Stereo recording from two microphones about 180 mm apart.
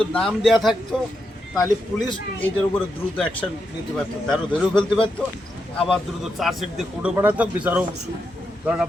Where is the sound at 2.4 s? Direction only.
10° left (ahead or behind).